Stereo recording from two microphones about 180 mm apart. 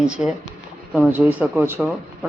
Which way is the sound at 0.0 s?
5° right (ahead or behind).